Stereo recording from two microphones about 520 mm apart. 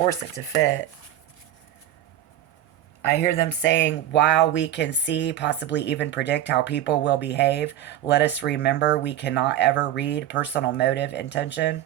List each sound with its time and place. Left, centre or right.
0.6 s speech: centre
3.1 s speech: centre